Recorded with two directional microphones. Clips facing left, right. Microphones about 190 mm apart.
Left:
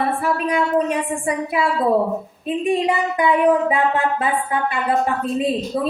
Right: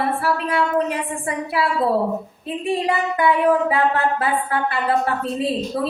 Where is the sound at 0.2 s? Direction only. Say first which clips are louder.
Left 1 dB; 15° left (ahead or behind).